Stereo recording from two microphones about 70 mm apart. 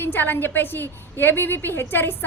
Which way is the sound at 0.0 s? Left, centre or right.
Left.